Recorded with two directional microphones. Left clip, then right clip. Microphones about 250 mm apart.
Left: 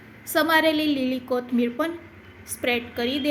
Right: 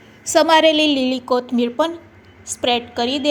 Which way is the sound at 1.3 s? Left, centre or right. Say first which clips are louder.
Right 6 dB; centre.